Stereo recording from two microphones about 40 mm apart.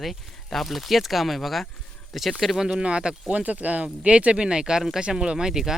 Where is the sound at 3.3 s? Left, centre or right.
Right.